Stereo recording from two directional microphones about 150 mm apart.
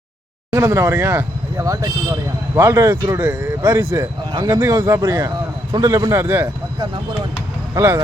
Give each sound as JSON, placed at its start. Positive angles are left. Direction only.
{"t": 0.5, "sound": "speech", "side_deg": -20}
{"t": 4.3, "sound": "speech", "side_deg": -30}
{"t": 7.8, "sound": "speech", "side_deg": -20}